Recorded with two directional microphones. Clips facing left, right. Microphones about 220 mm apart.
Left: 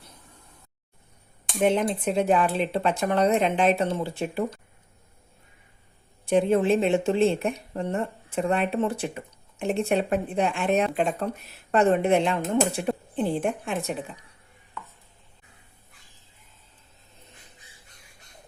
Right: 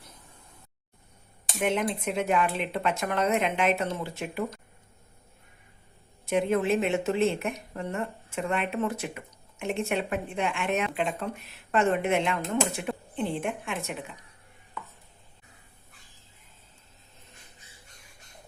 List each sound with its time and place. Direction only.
1.5 s a woman's voice: 30° left (ahead or behind)
6.2 s a woman's voice: 30° left (ahead or behind)